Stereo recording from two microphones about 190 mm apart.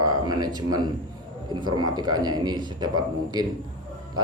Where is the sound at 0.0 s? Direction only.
20° right (ahead or behind).